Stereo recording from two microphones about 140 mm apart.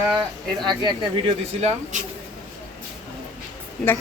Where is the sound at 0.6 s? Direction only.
30° right (ahead or behind).